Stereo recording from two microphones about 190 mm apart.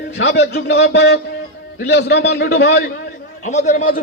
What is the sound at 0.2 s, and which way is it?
A man's voice, 60° left (ahead or behind).